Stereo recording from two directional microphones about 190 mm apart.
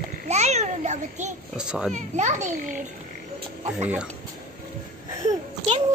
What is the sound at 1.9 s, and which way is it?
Speech, 40° right (ahead or behind).